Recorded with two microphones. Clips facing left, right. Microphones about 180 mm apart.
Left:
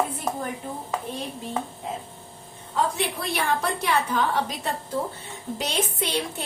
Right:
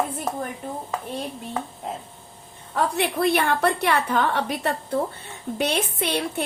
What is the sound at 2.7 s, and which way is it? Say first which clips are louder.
A woman's voice: right 3 dB; 60° right (ahead or behind).